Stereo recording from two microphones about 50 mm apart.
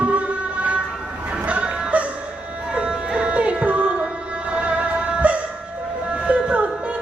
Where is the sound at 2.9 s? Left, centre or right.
Right.